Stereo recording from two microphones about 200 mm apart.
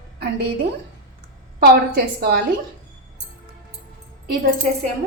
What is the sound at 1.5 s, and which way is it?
Speech, 50° right (ahead or behind).